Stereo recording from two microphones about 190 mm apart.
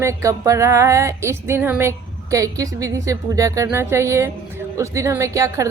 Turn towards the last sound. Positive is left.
turn(degrees=-15)  # may be behind; listen again after turning